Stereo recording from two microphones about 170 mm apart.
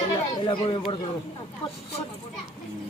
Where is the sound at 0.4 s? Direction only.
30° left (ahead or behind).